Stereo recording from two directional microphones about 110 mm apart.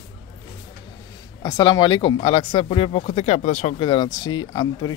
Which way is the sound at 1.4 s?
40° left (ahead or behind).